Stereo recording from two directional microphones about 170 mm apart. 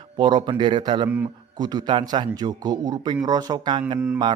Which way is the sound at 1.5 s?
25° right (ahead or behind).